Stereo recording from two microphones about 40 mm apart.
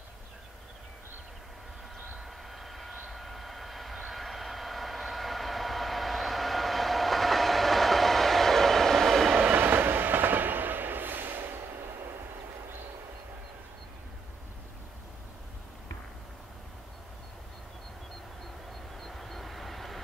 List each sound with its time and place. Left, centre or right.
2.1 s vehicle: centre
9.5 s train: right
18.9 s vehicle: centre